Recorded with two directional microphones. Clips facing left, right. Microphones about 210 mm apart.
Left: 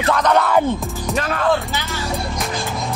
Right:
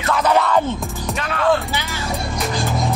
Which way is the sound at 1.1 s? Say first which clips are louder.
Left 5 dB; 40° left (ahead or behind).